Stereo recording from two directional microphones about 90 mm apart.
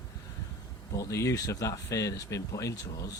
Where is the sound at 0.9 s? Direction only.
35° left (ahead or behind).